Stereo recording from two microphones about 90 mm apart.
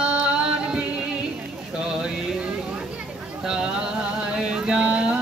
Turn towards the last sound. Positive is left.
turn(degrees=-10)  # may be behind; listen again after turning